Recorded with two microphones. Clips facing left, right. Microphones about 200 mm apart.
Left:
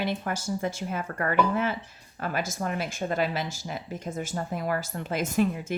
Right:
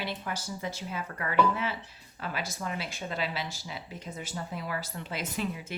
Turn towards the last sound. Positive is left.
turn(degrees=45)  # may be behind; listen again after turning